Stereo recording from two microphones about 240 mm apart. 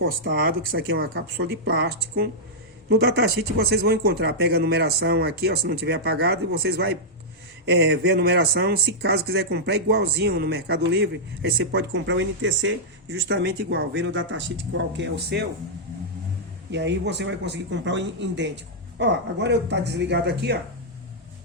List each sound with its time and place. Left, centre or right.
0.0 s speech: right
16.7 s speech: right